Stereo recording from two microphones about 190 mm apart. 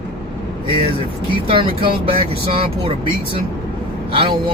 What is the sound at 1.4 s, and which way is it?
Speech, 30° right (ahead or behind).